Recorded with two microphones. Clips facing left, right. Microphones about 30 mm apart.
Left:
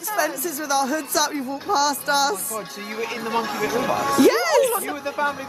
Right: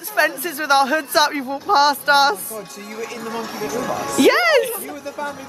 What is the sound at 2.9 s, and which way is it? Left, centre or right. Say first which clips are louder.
Speech: left 3 dB; left.